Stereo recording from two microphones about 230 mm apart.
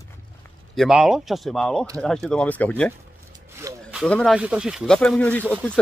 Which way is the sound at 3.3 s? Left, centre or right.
Centre.